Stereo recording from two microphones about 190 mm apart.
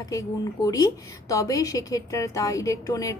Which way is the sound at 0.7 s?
15° left (ahead or behind).